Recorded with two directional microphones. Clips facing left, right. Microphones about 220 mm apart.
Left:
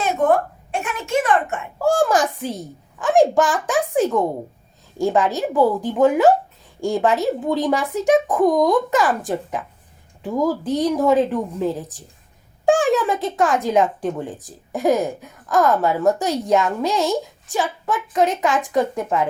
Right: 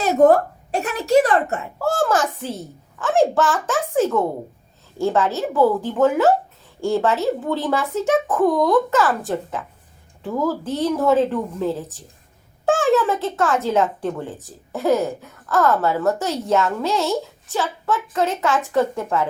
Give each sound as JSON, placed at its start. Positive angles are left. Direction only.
{"t": 0.0, "sound": "a woman's voice", "side_deg": -40}
{"t": 1.8, "sound": "speech", "side_deg": 15}